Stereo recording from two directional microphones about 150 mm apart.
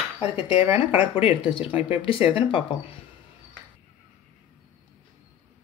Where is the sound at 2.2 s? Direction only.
35° left (ahead or behind).